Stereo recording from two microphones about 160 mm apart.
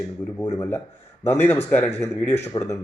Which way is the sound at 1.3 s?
10° left (ahead or behind).